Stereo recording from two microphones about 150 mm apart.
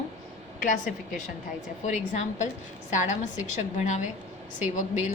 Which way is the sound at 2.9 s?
55° left (ahead or behind).